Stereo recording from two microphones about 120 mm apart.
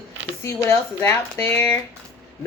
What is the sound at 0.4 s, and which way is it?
Speech, 20° left (ahead or behind).